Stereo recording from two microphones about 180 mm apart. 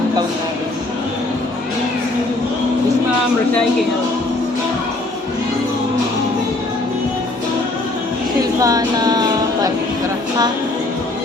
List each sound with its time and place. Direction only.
8.6 s music: 20° right (ahead or behind)